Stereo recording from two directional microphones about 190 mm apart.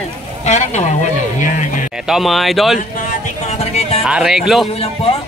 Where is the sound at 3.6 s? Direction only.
35° left (ahead or behind).